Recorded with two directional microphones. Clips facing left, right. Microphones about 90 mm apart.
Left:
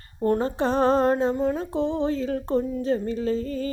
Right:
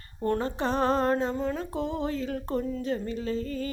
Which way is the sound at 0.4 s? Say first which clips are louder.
Left 4 dB; 35° left (ahead or behind).